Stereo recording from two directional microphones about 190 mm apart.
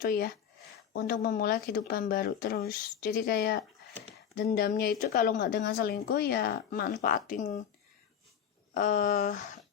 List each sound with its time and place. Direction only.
0.0 s a woman's voice: 50° left (ahead or behind)
8.7 s a woman's voice: 45° left (ahead or behind)